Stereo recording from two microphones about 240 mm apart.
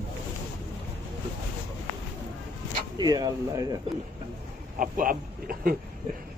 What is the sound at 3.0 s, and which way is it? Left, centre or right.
Speech, centre.